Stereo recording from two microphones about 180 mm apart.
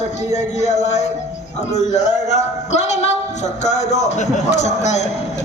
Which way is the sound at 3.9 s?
40° left (ahead or behind).